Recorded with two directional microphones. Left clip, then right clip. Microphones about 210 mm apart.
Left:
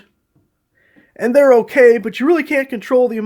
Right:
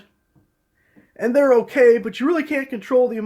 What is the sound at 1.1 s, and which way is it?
Speech, 40° left (ahead or behind).